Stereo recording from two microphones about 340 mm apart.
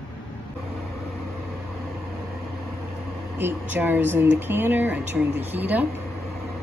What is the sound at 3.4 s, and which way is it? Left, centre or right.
Speech, centre.